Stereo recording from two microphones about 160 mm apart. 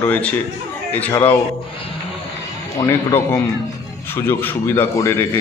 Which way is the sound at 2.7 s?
15° left (ahead or behind).